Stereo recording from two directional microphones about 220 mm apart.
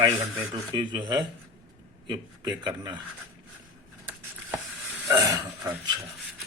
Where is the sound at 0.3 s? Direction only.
20° right (ahead or behind).